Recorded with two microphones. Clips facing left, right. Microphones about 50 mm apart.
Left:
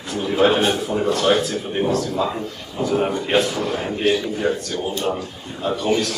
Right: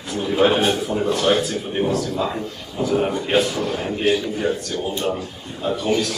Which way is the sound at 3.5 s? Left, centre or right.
Centre.